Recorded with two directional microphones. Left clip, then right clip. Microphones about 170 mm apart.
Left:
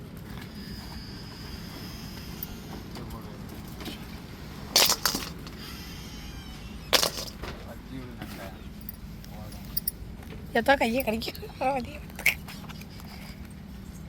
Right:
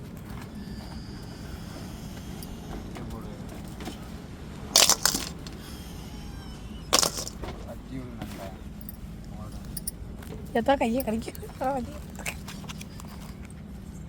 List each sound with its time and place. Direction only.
4.8 s crushing: 65° right (ahead or behind)
6.9 s vehicle: 70° right (ahead or behind)
10.5 s a woman's voice: 5° right (ahead or behind)